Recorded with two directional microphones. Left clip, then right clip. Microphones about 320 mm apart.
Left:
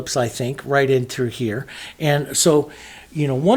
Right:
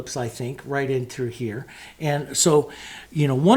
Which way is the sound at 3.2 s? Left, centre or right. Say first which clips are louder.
Left 1 dB; centre.